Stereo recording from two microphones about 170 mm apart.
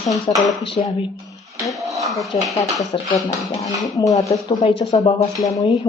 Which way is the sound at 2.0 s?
Centre (ahead or behind).